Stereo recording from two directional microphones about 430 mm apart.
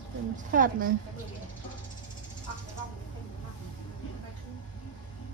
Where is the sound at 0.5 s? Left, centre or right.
Centre.